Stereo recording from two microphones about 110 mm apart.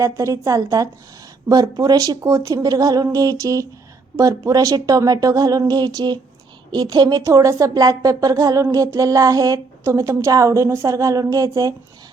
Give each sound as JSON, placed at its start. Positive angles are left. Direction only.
{"t": 0.0, "sound": "speech", "side_deg": -30}